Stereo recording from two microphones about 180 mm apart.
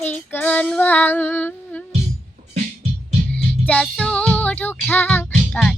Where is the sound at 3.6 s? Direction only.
5° left (ahead or behind).